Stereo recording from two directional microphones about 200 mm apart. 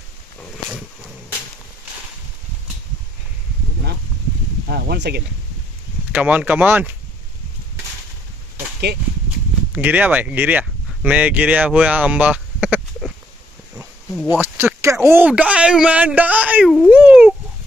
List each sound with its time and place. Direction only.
0.7 s wild animals: centre (ahead or behind)
4.6 s speech: 55° right (ahead or behind)
6.1 s speech: 10° right (ahead or behind)
9.7 s speech: 10° right (ahead or behind)
16.9 s cat: 10° right (ahead or behind)